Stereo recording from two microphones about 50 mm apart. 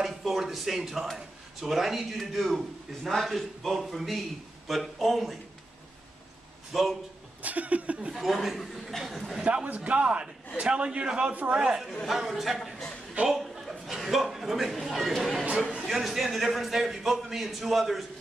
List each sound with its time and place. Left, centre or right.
0.0 s a man's voice: centre
6.7 s a man's voice: centre
7.4 s a man's voice: right
8.1 s a man's voice: centre
9.4 s a man's voice: right
11.5 s a man's voice: centre